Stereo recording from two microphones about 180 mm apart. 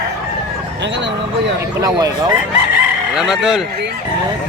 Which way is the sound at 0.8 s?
80° right.